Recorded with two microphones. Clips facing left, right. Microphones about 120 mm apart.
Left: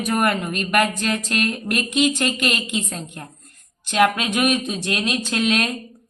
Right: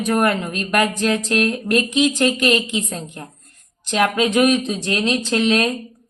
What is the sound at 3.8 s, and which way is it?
Speech, 10° left (ahead or behind).